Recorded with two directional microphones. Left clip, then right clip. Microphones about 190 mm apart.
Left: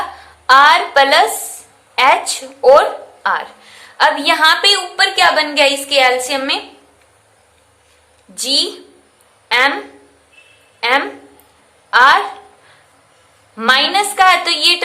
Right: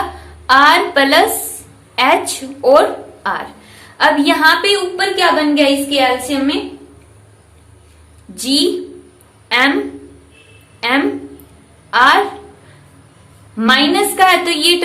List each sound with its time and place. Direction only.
0.4 s a woman's voice: 20° left (ahead or behind)
4.9 s a woman's voice: 40° left (ahead or behind)
8.4 s a woman's voice: 20° left (ahead or behind)
10.8 s a sound: 20° left (ahead or behind)
11.9 s a woman's voice: 20° left (ahead or behind)
13.6 s a woman's voice: 25° left (ahead or behind)